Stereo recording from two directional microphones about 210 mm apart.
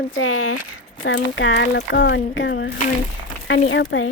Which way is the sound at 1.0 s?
60° left (ahead or behind).